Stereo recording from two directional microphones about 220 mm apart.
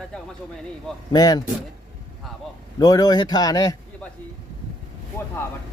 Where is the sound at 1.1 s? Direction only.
15° left (ahead or behind).